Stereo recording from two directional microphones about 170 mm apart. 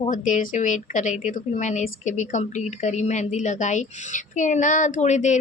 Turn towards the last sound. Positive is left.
turn(degrees=45)  # may be behind; listen again after turning